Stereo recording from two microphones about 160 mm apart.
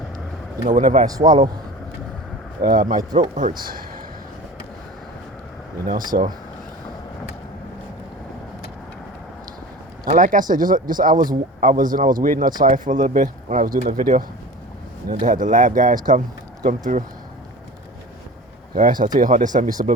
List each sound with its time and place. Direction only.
0.7 s speech: 55° right (ahead or behind)
2.6 s speech: 60° right (ahead or behind)
5.8 s speech: 60° right (ahead or behind)
10.2 s speech: 55° right (ahead or behind)
18.7 s speech: 60° right (ahead or behind)